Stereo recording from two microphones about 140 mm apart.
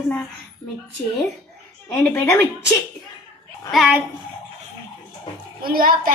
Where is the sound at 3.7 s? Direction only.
5° right (ahead or behind).